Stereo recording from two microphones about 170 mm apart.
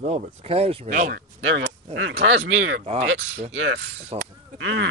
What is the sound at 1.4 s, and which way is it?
Speech, 90° right.